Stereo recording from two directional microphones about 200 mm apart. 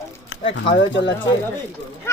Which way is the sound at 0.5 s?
60° left (ahead or behind).